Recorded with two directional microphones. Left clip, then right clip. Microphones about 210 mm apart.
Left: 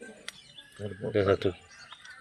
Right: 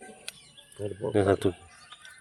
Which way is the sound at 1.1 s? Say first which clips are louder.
Right 1 dB; 15° right (ahead or behind).